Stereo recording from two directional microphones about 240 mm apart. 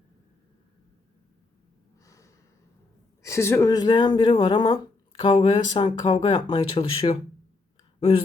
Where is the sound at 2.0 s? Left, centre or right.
Centre.